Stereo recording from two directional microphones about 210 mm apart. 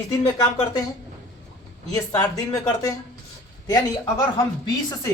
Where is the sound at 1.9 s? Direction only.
15° left (ahead or behind).